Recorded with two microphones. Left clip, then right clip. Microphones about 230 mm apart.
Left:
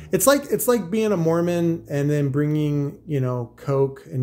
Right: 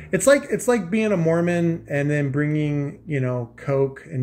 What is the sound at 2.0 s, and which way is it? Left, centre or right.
Speech, centre.